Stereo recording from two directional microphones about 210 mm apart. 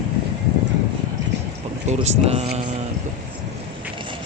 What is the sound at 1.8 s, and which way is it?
Speech, 30° right (ahead or behind).